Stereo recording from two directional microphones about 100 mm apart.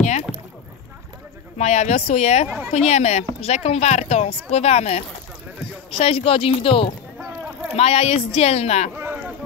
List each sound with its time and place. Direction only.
0.3 s rowboat: centre (ahead or behind)
1.6 s speech: 90° left; by 6.9 s 65° left (ahead or behind)
7.7 s speech: 90° left
8.9 s a sound: 20° right (ahead or behind)